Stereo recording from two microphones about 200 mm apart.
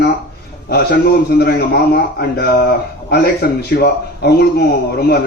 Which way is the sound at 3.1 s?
55° left (ahead or behind).